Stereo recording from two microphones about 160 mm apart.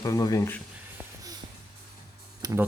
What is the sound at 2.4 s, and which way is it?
Speech, 20° right (ahead or behind).